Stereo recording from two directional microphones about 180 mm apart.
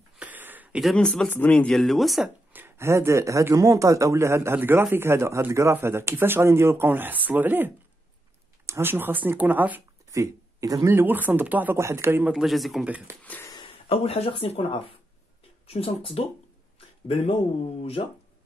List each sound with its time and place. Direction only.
0.2 s speech: 10° right (ahead or behind)
13.2 s speech: 10° left (ahead or behind)
13.5 s speech: 25° left (ahead or behind)